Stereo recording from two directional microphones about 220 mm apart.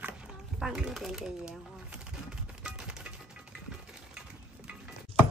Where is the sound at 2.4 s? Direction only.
5° right (ahead or behind).